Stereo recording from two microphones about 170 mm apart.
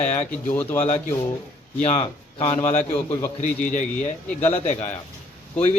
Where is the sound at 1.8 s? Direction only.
40° left (ahead or behind).